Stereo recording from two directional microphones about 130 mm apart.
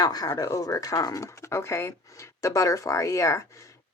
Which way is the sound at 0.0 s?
30° left (ahead or behind).